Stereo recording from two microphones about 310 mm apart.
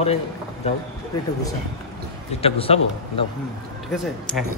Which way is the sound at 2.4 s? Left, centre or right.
Centre.